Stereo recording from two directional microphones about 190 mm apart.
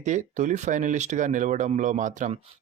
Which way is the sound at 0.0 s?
40° right (ahead or behind).